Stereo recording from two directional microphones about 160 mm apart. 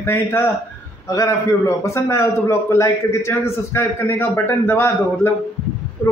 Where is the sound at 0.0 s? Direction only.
15° left (ahead or behind).